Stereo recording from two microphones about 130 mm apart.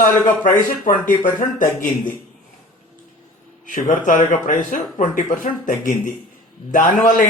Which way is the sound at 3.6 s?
85° left.